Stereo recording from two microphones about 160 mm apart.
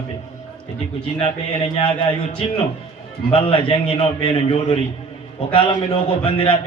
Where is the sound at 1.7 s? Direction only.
35° left (ahead or behind).